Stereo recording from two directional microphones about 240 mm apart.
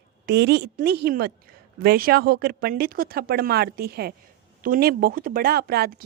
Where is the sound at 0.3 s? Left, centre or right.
Right.